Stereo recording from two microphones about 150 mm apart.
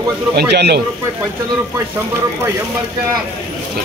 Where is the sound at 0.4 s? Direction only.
90° right.